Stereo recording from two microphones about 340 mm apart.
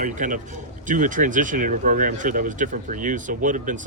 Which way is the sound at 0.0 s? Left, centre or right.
Right.